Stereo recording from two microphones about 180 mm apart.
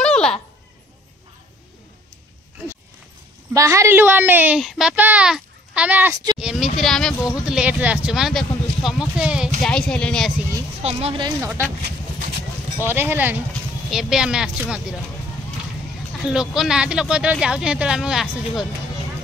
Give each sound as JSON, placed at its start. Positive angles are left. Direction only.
{"t": 0.0, "sound": "a sound", "side_deg": 5}
{"t": 3.5, "sound": "a woman's voice", "side_deg": -15}
{"t": 10.8, "sound": "speech", "side_deg": -35}
{"t": 11.2, "sound": "a woman's voice", "side_deg": -15}
{"t": 12.9, "sound": "a woman's voice", "side_deg": -10}
{"t": 16.3, "sound": "speech", "side_deg": -5}